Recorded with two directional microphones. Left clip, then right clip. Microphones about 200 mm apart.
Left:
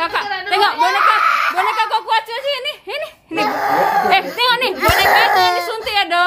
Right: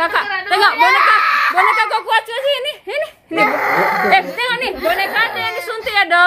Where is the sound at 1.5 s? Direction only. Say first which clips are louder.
Right 3 dB; 5° right (ahead or behind); by 4.7 s 15° left (ahead or behind).